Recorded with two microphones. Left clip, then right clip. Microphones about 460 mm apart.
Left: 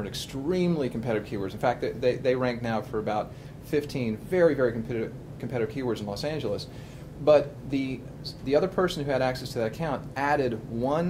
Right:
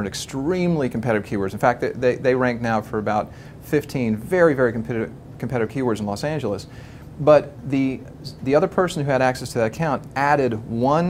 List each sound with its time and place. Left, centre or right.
0.0 s speech: right